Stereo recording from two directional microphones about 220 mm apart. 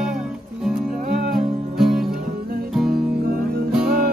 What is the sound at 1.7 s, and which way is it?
Music, centre (ahead or behind).